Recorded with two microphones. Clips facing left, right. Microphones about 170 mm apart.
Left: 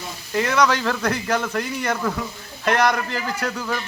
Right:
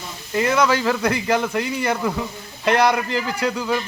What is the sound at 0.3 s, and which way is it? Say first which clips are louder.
Speech: right 1 dB; 10° right (ahead or behind).